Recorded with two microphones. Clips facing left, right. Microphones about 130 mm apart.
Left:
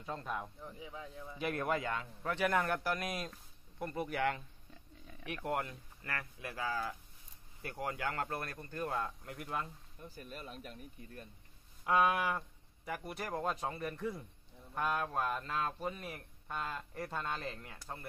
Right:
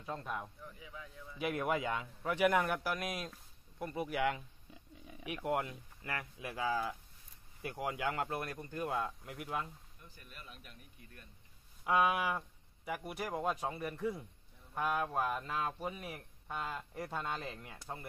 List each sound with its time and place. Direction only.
0.0 s speech: centre (ahead or behind)
0.6 s a man's voice: 30° left (ahead or behind)
1.4 s speech: 10° right (ahead or behind)
10.0 s speech: 40° left (ahead or behind)
11.8 s speech: 5° right (ahead or behind)